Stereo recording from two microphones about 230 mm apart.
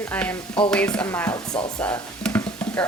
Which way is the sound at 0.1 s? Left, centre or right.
Centre.